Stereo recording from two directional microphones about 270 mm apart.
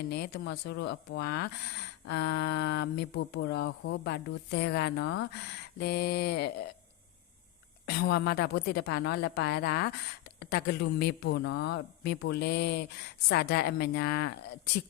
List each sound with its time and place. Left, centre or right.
0.1 s speech: left
7.9 s speech: left